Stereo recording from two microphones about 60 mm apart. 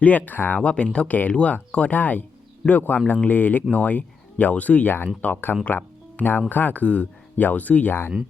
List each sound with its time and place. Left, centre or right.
0.0 s speech: left
5.6 s music: left
6.5 s speech: left